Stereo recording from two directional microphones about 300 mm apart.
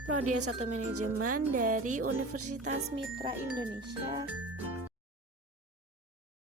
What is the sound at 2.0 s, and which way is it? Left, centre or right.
Speech, right.